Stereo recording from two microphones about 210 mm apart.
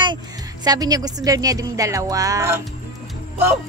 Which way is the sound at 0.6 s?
20° right (ahead or behind).